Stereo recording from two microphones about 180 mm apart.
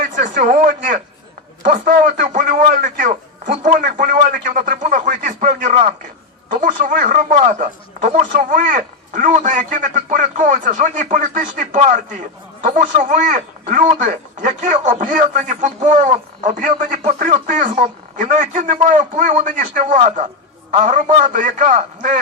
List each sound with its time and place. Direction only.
0.2 s a man's voice: 45° right (ahead or behind)
1.6 s a sound: 50° right (ahead or behind)
6.5 s a man's voice: 45° right (ahead or behind)